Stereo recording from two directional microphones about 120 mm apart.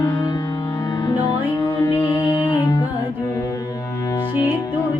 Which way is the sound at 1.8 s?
35° left (ahead or behind).